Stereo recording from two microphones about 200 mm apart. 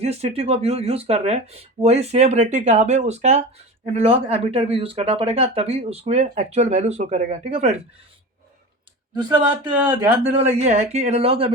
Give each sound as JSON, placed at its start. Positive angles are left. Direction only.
{"t": 0.0, "sound": "speech", "side_deg": -30}
{"t": 10.0, "sound": "speech", "side_deg": -30}